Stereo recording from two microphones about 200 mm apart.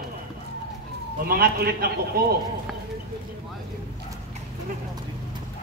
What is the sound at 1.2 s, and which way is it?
Speech, 50° right (ahead or behind).